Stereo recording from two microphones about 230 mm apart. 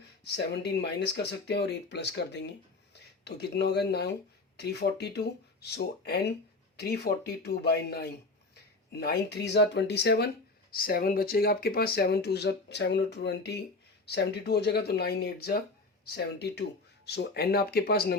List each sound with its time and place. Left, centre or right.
0.3 s speech: left